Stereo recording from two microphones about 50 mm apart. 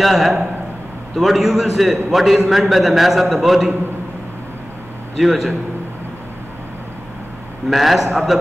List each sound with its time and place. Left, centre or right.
0.0 s a man's voice: centre
5.2 s a man's voice: centre
7.7 s a man's voice: centre